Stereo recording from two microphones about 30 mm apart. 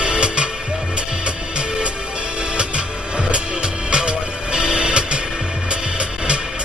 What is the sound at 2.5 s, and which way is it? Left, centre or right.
Music, right.